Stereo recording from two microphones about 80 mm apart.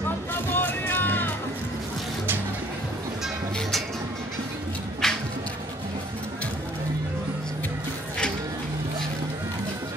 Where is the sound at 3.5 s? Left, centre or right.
Centre.